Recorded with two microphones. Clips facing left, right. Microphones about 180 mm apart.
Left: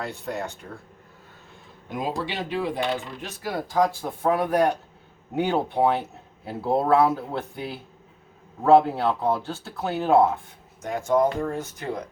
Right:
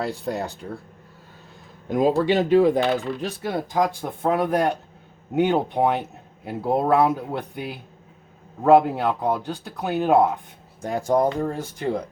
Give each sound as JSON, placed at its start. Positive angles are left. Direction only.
{"t": 0.0, "sound": "speech", "side_deg": -35}
{"t": 1.9, "sound": "speech", "side_deg": -45}
{"t": 3.2, "sound": "speech", "side_deg": -25}
{"t": 10.8, "sound": "speech", "side_deg": -35}